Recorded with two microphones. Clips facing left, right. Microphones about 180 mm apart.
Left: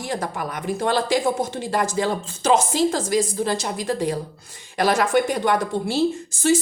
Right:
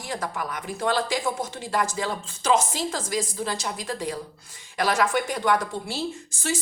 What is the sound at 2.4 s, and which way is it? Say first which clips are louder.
Speech: left 3 dB; 70° left (ahead or behind).